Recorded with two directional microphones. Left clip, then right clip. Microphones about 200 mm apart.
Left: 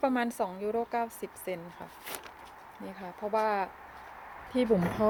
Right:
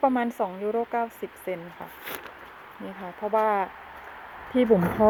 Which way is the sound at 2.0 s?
Centre (ahead or behind).